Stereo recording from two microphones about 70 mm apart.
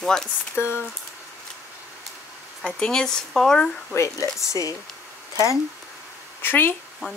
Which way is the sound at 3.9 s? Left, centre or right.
Left.